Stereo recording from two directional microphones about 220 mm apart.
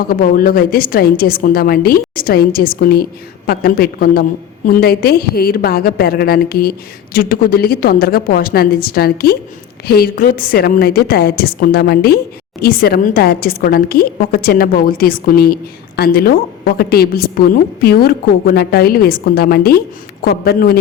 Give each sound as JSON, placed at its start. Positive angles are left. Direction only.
{"t": 0.0, "sound": "a woman's voice", "side_deg": 40}